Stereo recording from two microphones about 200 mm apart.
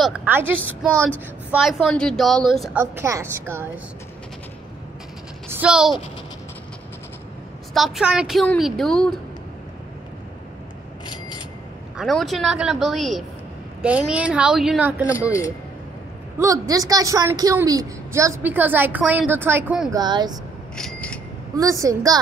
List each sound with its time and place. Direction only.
0.0 s a woman's voice: 5° right (ahead or behind)
2.8 s a woman's voice: 15° right (ahead or behind)
5.5 s a woman's voice: 5° right (ahead or behind)
7.7 s a woman's voice: centre (ahead or behind)
11.1 s a sound: 20° left (ahead or behind)
12.0 s a woman's voice: centre (ahead or behind)
16.3 s a woman's voice: 15° right (ahead or behind)
19.9 s speech: 20° right (ahead or behind)
20.7 s a sound: 5° left (ahead or behind)
21.5 s a woman's voice: 15° right (ahead or behind)